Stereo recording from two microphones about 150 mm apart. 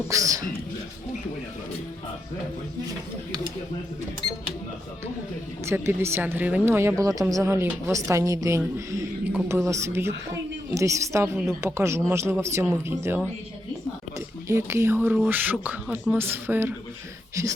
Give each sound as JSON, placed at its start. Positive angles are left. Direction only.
{"t": 0.1, "sound": "a woman's voice", "side_deg": -20}
{"t": 5.6, "sound": "a woman's voice", "side_deg": -15}
{"t": 14.4, "sound": "a woman's voice", "side_deg": -20}